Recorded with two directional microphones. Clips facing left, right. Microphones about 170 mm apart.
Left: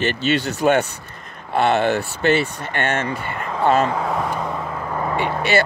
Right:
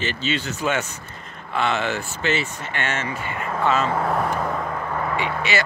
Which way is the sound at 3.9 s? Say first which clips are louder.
Even; centre (ahead or behind).